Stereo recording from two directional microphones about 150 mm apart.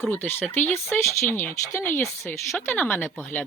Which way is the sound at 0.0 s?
15° left (ahead or behind).